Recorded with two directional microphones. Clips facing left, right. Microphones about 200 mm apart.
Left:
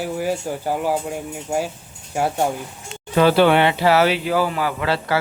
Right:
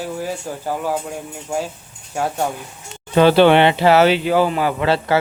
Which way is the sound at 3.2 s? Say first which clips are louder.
Right 3 dB; 25° right (ahead or behind).